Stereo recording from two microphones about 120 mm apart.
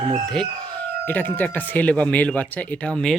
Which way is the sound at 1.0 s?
15° left (ahead or behind).